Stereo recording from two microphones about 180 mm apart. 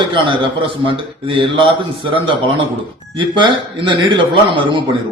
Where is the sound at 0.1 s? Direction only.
30° right (ahead or behind).